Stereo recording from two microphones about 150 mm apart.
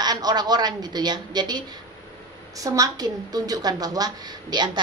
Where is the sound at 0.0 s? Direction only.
25° right (ahead or behind).